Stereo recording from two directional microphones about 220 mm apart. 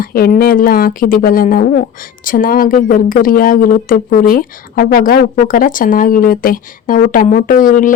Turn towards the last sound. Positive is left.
turn(degrees=35)  # may be behind; listen again after turning